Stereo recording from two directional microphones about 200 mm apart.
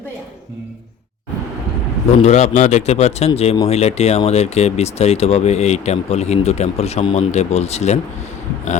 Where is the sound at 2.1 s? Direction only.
35° left (ahead or behind).